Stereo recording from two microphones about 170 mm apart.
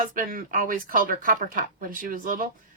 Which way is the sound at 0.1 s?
55° right (ahead or behind).